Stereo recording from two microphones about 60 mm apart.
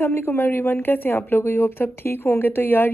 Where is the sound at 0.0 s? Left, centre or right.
Left.